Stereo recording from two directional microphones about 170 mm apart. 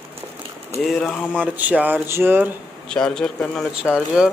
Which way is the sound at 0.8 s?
5° left (ahead or behind).